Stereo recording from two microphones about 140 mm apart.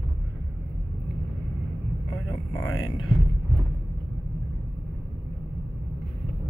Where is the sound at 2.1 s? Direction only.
30° left (ahead or behind).